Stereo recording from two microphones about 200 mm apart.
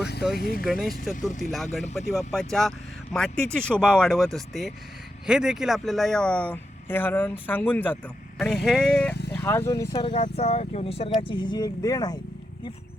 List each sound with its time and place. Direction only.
0.3 s speech: 50° left (ahead or behind)
0.6 s speech: centre (ahead or behind)
9.3 s speech: 15° left (ahead or behind)
9.9 s speech: 25° left (ahead or behind)